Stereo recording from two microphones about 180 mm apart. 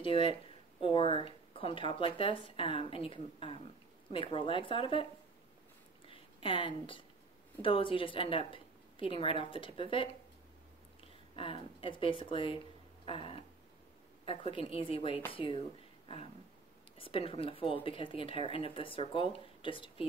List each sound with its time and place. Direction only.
0.0 s speech: 30° left (ahead or behind)
6.0 s a sound: 30° left (ahead or behind)
7.6 s speech: 30° left (ahead or behind)
11.3 s speech: 30° left (ahead or behind)
13.0 s a sound: 30° left (ahead or behind)
14.2 s speech: 30° left (ahead or behind)
17.0 s speech: 30° left (ahead or behind)